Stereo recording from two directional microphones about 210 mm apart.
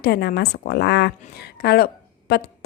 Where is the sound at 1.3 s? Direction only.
50° left (ahead or behind).